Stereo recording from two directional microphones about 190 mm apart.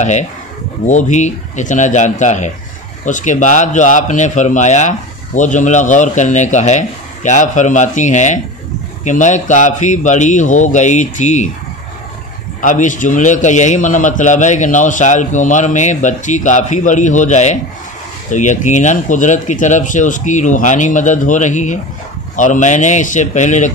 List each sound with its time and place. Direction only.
0.8 s a man's voice: 40° left (ahead or behind)
12.6 s a man's voice: 40° left (ahead or behind)